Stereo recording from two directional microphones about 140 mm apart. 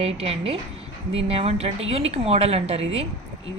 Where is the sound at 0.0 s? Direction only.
45° right (ahead or behind).